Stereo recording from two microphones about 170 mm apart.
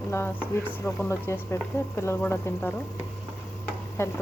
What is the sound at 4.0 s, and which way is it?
Speech, 15° left (ahead or behind).